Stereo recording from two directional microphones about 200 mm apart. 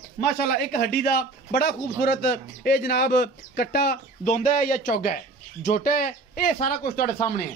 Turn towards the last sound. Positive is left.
turn(degrees=45)  # may be behind; listen again after turning